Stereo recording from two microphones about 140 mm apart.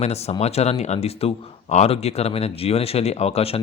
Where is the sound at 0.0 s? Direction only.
50° left (ahead or behind).